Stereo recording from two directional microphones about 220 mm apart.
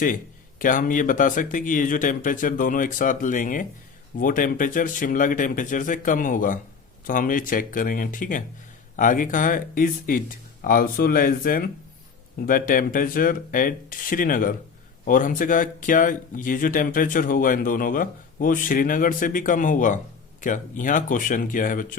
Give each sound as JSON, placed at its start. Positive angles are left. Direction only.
{"t": 0.6, "sound": "speech", "side_deg": 35}